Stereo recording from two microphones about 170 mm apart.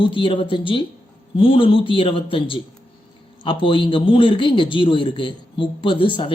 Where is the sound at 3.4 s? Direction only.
30° left (ahead or behind).